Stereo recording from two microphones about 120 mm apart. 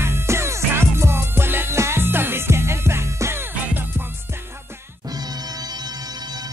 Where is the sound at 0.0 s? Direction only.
20° right (ahead or behind).